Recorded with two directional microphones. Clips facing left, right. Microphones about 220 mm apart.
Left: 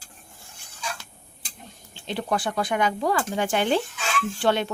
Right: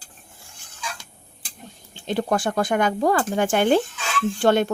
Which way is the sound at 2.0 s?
45° right (ahead or behind).